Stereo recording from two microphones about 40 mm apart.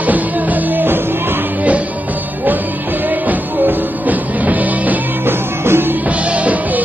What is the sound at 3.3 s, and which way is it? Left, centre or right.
Music, right.